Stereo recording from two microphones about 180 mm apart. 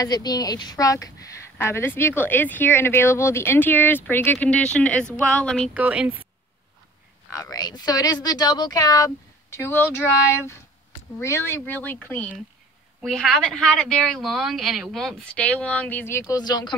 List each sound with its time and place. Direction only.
0.0 s a woman's voice: 20° left (ahead or behind); by 5.7 s 5° left (ahead or behind)
5.8 s speech: 10° right (ahead or behind)
7.2 s a woman's voice: 15° left (ahead or behind)